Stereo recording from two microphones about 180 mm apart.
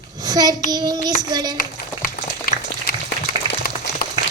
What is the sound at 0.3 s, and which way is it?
Child singing, 20° right (ahead or behind).